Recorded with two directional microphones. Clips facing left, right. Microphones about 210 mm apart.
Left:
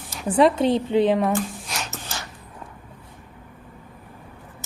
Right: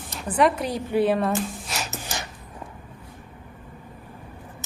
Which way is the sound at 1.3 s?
5° right (ahead or behind).